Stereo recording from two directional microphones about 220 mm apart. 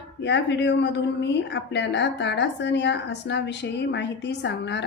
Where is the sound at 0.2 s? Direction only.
50° left (ahead or behind).